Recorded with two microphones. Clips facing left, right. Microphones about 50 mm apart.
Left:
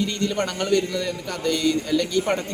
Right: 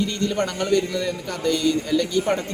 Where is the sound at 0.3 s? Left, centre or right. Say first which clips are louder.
Right 1 dB; centre.